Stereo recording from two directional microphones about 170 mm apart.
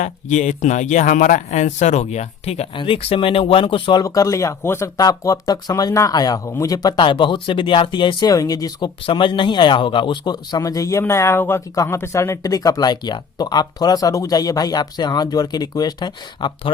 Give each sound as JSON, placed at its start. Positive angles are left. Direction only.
{"t": 0.0, "sound": "speech", "side_deg": 45}